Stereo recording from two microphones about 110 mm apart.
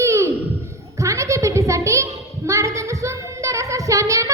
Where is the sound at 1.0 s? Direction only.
30° right (ahead or behind).